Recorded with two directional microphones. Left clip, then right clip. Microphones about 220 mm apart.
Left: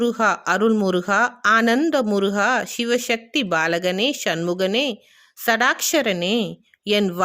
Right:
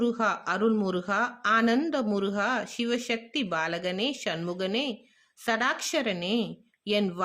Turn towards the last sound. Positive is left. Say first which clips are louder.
# left 7 dB
turn(degrees=40)  # may be behind; listen again after turning